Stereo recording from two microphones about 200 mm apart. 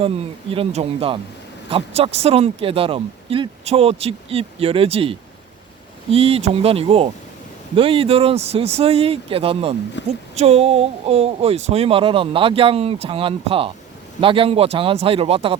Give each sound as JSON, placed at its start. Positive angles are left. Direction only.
{"t": 0.5, "sound": "speech", "side_deg": -30}
{"t": 10.0, "sound": "a woman's voice", "side_deg": 60}
{"t": 10.3, "sound": "speech", "side_deg": -30}